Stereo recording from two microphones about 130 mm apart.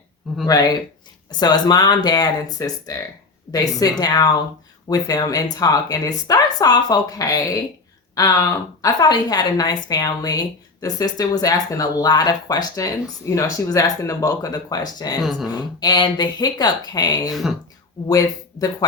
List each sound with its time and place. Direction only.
0.4 s a woman's voice: 25° left (ahead or behind)